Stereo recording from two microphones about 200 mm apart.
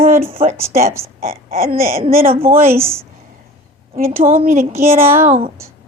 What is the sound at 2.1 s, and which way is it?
Speech, 10° right (ahead or behind).